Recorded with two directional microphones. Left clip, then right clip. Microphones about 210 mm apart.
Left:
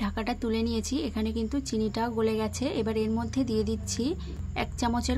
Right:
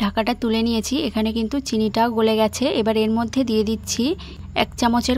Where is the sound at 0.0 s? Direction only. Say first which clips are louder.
Right 10 dB; 45° right (ahead or behind).